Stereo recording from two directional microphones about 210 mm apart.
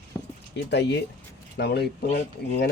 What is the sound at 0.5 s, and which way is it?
Speech, 55° left (ahead or behind).